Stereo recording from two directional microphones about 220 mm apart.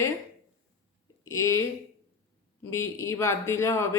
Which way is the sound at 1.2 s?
70° left (ahead or behind).